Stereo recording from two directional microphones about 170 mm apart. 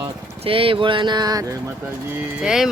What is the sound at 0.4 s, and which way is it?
Speech, 30° right (ahead or behind).